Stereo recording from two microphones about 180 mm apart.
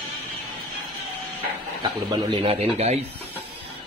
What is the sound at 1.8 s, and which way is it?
Speech, 25° right (ahead or behind).